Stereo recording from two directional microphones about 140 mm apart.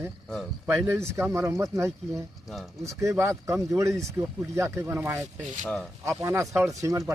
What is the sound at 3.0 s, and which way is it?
Speech, 20° right (ahead or behind).